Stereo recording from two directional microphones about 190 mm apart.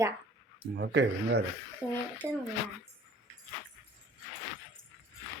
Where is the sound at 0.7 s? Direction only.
65° right (ahead or behind).